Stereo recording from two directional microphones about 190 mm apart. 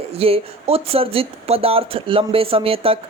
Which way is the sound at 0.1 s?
30° right (ahead or behind).